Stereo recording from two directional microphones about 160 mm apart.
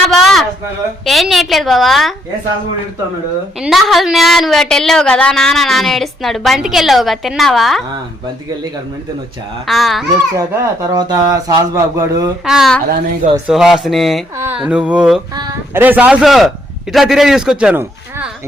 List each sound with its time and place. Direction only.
0.1 s a sound: centre (ahead or behind)
1.0 s speech: centre (ahead or behind)
3.6 s speech: centre (ahead or behind)
9.6 s speech: centre (ahead or behind)
10.3 s speech: 20° right (ahead or behind)
12.5 s a man's voice: centre (ahead or behind)